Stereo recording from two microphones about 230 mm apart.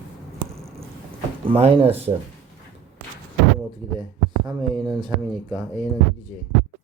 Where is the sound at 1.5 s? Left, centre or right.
Right.